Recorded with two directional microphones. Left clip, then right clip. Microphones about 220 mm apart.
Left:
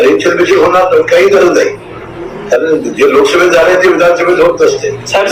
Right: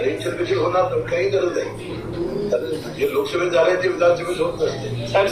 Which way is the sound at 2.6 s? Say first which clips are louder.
Left 15 dB; 35° left (ahead or behind).